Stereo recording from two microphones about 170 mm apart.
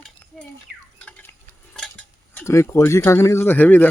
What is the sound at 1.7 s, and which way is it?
Cutlery, 5° left (ahead or behind).